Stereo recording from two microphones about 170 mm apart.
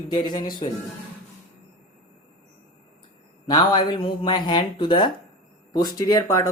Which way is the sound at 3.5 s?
25° left (ahead or behind).